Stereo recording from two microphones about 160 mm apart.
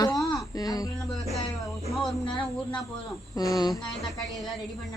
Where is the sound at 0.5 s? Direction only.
25° left (ahead or behind).